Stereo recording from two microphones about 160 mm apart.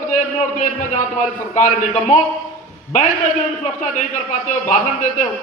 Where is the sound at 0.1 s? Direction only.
50° left (ahead or behind).